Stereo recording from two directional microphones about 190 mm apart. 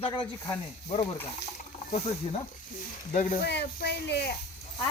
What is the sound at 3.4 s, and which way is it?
Speech, 60° left (ahead or behind).